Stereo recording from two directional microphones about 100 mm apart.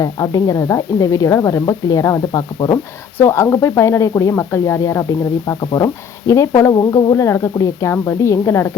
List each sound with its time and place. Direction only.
0.0 s speech: 35° left (ahead or behind)